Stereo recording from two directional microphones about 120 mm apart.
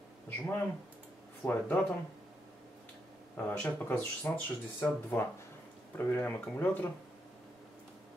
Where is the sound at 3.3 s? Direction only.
10° left (ahead or behind).